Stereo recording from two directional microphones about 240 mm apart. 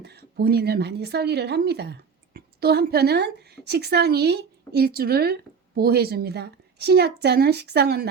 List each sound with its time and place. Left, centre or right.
0.0 s speech: right